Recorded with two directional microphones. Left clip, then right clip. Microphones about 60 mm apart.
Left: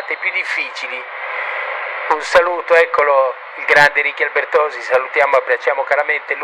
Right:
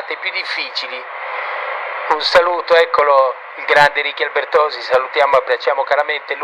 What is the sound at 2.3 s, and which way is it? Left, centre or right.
Speech, centre.